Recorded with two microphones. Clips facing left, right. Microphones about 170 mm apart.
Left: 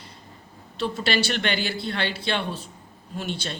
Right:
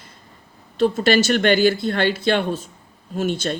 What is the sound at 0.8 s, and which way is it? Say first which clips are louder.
Speech: right 8 dB; 45° right (ahead or behind).